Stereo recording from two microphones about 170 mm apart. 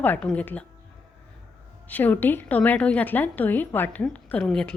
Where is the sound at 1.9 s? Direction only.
10° left (ahead or behind).